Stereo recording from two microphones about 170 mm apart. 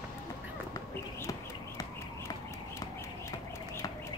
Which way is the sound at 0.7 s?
20° left (ahead or behind).